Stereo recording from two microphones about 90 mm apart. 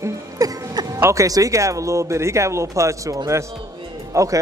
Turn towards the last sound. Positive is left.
turn(degrees=-35)  # may be behind; listen again after turning